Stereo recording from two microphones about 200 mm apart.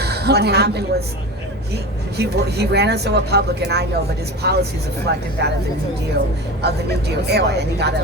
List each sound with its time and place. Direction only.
0.0 s a woman's voice: 55° right (ahead or behind)
6.6 s speech: 55° right (ahead or behind)